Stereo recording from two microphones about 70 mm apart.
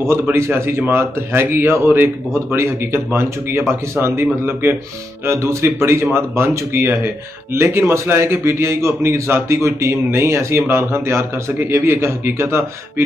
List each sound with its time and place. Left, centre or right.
0.0 s a man's voice: right